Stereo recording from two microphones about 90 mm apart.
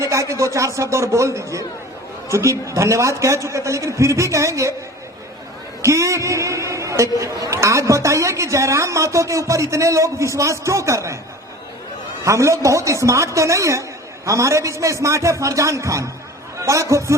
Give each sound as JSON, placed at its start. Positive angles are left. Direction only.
{"t": 0.0, "sound": "a man's voice", "side_deg": -35}
{"t": 5.8, "sound": "a man's voice", "side_deg": -35}
{"t": 12.2, "sound": "a man's voice", "side_deg": -35}